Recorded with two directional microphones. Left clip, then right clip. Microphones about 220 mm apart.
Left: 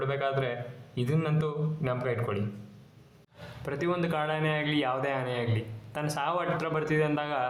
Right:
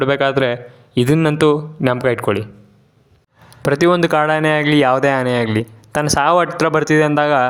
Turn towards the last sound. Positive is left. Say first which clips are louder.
# right 15 dB
turn(degrees=-45)  # may be behind; listen again after turning